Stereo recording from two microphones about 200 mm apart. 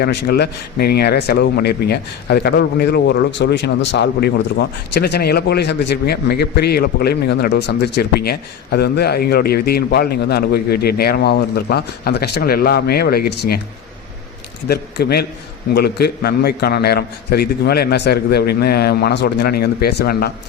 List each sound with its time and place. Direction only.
0.0 s speech: 55° left (ahead or behind)
14.7 s speech: 55° left (ahead or behind)